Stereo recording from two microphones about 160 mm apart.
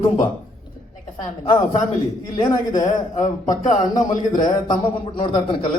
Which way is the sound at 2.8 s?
50° left (ahead or behind).